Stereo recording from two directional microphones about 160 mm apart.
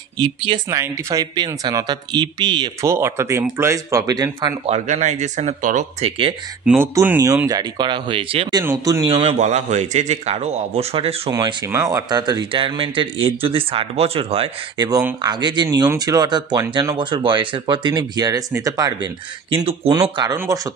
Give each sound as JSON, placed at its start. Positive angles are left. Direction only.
{"t": 0.2, "sound": "speech", "side_deg": -35}
{"t": 0.7, "sound": "speech", "side_deg": -20}
{"t": 2.9, "sound": "speech", "side_deg": -15}
{"t": 4.6, "sound": "speech", "side_deg": -45}
{"t": 6.8, "sound": "speech", "side_deg": -15}
{"t": 8.6, "sound": "speech", "side_deg": -15}
{"t": 9.0, "sound": "speech", "side_deg": -35}
{"t": 11.2, "sound": "speech", "side_deg": -20}
{"t": 14.8, "sound": "speech", "side_deg": -20}
{"t": 19.5, "sound": "speech", "side_deg": -35}
{"t": 19.9, "sound": "speech", "side_deg": -25}